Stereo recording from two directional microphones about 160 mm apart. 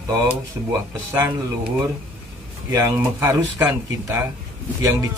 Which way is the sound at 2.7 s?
20° right (ahead or behind).